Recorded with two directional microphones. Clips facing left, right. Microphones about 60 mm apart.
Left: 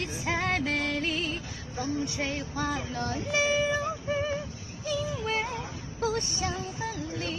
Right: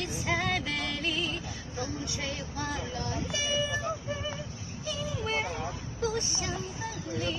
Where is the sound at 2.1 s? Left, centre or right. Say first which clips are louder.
Left 4 dB; left.